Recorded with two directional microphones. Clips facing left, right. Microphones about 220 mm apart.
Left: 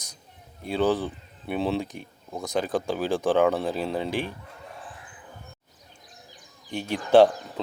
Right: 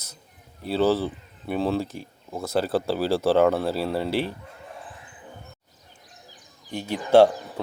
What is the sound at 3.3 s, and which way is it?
Speech, 5° right (ahead or behind).